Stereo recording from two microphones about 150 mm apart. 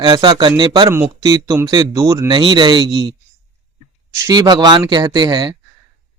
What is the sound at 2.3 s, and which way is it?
Speech, 30° right (ahead or behind).